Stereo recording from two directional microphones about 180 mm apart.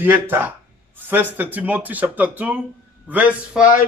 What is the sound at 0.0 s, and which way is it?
Speech, 10° right (ahead or behind).